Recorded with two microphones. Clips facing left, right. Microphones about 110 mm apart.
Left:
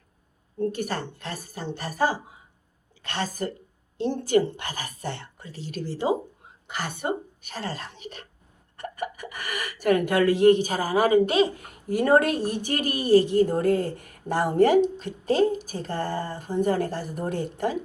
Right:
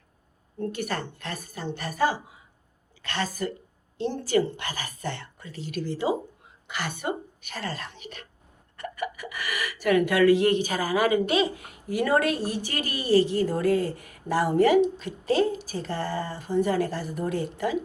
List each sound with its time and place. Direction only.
0.7 s a woman's voice: 35° left (ahead or behind)
5.5 s a woman's voice: 50° right (ahead or behind)
5.7 s a woman's voice: 35° left (ahead or behind)